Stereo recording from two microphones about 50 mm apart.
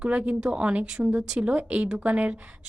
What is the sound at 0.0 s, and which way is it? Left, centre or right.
A woman's voice, right.